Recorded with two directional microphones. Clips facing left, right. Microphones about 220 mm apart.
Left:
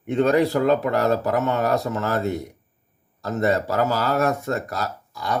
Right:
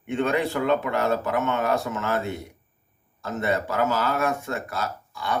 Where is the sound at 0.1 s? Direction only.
40° left (ahead or behind).